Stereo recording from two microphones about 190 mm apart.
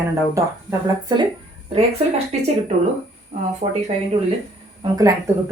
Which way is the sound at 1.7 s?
35° right (ahead or behind).